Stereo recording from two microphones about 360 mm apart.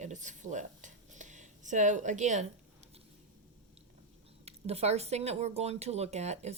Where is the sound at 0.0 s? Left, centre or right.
Centre.